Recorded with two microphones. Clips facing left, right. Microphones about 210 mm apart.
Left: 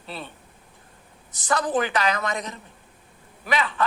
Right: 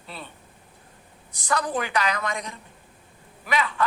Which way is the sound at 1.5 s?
30° left (ahead or behind).